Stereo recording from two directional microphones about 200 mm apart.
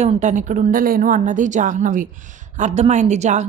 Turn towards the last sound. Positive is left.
turn(degrees=-35)  # may be behind; listen again after turning